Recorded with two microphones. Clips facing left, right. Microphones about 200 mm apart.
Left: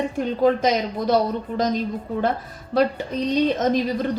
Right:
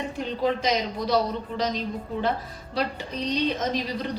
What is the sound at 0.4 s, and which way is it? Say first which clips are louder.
A woman's voice: left 5 dB; 50° left (ahead or behind).